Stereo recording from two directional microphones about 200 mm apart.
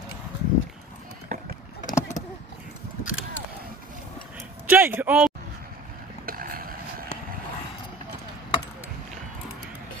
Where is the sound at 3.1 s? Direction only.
80° left.